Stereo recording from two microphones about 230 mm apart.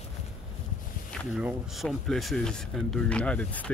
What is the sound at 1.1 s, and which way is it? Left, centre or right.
Speech, centre.